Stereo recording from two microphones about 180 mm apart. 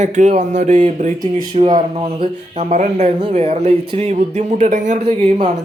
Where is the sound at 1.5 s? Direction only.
30° right (ahead or behind).